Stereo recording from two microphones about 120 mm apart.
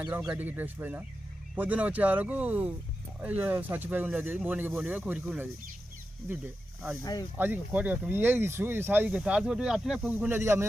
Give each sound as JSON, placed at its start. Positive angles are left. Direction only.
{"t": 0.3, "sound": "speech", "side_deg": -15}
{"t": 7.0, "sound": "speech", "side_deg": 30}
{"t": 7.3, "sound": "speech", "side_deg": -15}
{"t": 10.1, "sound": "speech", "side_deg": -15}